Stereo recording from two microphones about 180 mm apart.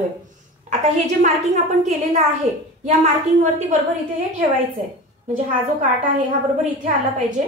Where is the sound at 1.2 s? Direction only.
40° right (ahead or behind).